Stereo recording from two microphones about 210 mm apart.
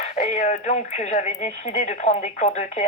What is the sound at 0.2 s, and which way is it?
Speech, 35° left (ahead or behind).